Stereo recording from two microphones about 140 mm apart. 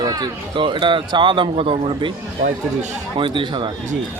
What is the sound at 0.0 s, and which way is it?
Speech, 30° right (ahead or behind).